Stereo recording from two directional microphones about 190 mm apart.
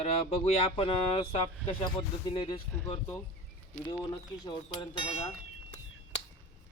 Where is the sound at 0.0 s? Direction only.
35° left (ahead or behind).